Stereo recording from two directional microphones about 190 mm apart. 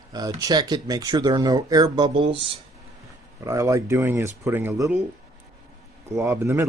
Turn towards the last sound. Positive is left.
turn(degrees=-15)  # may be behind; listen again after turning